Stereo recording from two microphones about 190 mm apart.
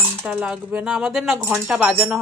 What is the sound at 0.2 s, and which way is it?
Speech, 5° right (ahead or behind).